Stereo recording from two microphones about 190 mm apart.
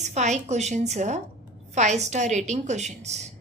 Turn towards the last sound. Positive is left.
turn(degrees=-35)  # may be behind; listen again after turning